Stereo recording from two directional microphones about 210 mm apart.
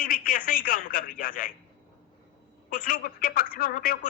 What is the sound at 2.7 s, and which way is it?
A man's voice, 40° left (ahead or behind).